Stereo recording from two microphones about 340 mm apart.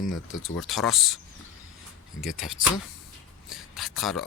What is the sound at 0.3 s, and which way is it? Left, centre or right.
Speech, left.